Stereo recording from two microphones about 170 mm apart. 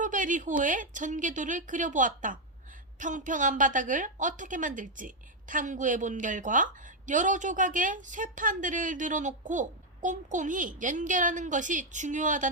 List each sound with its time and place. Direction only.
0.0 s a woman's voice: 50° right (ahead or behind)